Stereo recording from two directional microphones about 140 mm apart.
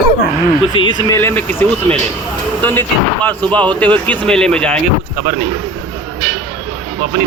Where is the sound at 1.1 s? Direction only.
15° left (ahead or behind).